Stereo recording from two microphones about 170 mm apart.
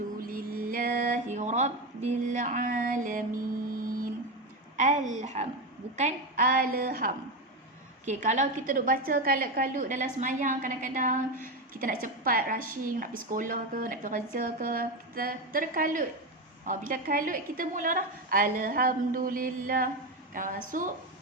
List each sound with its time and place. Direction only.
0.2 s a sound: 55° right (ahead or behind)
4.8 s a woman's voice: 45° right (ahead or behind)
8.0 s a woman's voice: 45° right (ahead or behind)